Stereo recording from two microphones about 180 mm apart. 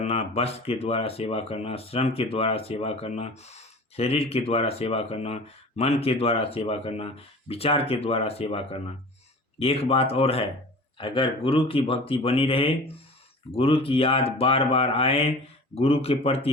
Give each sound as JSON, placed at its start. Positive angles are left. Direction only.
{"t": 0.0, "sound": "speech", "side_deg": 35}